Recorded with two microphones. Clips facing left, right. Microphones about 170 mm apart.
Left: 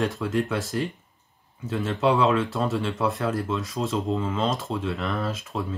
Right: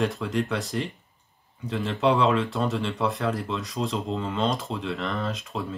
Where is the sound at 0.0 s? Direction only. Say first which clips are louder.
Left 1 dB; centre (ahead or behind).